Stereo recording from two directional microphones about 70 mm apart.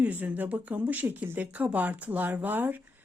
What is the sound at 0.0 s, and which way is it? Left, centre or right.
Speech, right.